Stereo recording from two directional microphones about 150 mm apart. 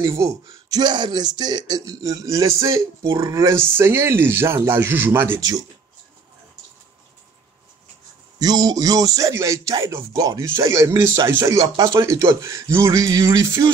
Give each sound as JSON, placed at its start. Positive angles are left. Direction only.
{"t": 0.0, "sound": "speech", "side_deg": -25}
{"t": 8.4, "sound": "speech", "side_deg": -25}